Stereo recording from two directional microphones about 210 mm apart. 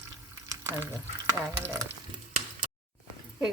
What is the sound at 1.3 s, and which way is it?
Speech, 10° right (ahead or behind).